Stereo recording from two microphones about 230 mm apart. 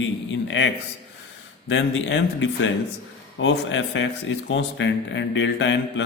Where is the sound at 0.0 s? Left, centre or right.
Left.